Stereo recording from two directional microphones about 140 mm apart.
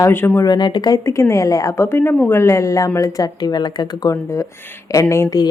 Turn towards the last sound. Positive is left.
turn(degrees=20)  # may be behind; listen again after turning